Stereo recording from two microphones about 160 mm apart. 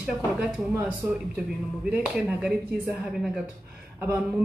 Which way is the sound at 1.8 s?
5° right (ahead or behind).